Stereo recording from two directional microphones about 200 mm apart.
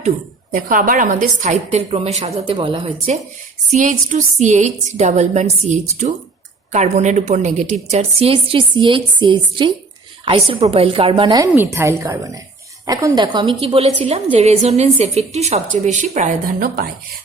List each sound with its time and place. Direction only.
0.5 s a woman's voice: 45° right (ahead or behind); by 3.2 s 25° right (ahead or behind)
3.7 s a woman's voice: 40° right (ahead or behind); by 11.4 s 25° right (ahead or behind)
11.5 s a woman's voice: 10° right (ahead or behind); by 16.9 s 45° right (ahead or behind)